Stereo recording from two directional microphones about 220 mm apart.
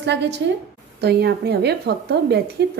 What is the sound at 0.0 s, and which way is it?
Speech, 50° right (ahead or behind).